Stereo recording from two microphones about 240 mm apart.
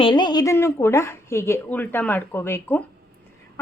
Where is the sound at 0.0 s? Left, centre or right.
Centre.